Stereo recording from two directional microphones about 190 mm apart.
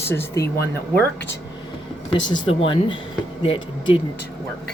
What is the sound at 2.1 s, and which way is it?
Speech, 25° left (ahead or behind).